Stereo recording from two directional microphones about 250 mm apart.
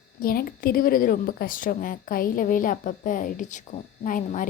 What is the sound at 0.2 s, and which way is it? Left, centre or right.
A woman's voice, left.